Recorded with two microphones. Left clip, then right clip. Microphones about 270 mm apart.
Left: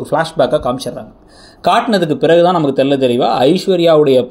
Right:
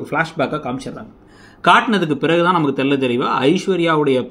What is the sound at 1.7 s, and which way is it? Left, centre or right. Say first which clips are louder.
Speech: left 1 dB; centre.